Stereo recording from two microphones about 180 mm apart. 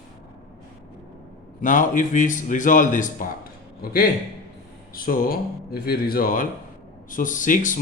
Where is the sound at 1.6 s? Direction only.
45° left (ahead or behind).